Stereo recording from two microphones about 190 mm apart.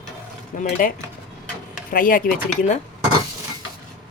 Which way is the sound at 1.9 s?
45° left (ahead or behind).